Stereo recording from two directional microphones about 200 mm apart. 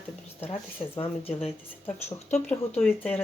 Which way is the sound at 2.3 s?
10° left (ahead or behind).